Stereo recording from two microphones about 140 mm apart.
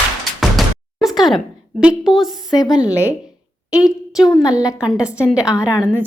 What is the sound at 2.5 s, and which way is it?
A woman's voice, 30° left (ahead or behind).